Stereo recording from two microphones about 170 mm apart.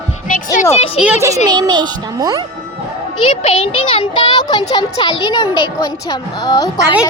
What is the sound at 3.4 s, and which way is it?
A child's voice, 30° left (ahead or behind).